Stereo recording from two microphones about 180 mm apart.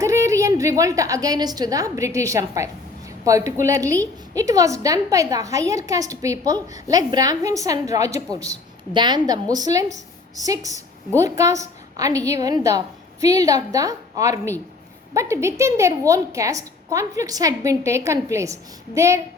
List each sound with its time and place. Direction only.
0.0 s a woman's voice: 15° right (ahead or behind)